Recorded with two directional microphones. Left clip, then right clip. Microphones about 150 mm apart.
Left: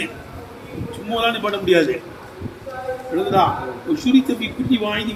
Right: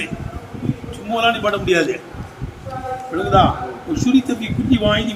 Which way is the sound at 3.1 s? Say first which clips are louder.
Right 2 dB; 15° right (ahead or behind).